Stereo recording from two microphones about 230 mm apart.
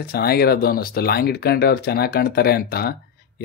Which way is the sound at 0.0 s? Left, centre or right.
Left.